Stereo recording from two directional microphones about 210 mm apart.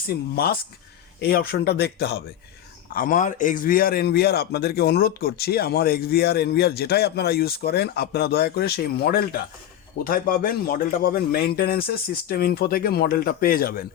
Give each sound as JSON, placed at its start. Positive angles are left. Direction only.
{"t": 0.1, "sound": "a man's voice", "side_deg": 45}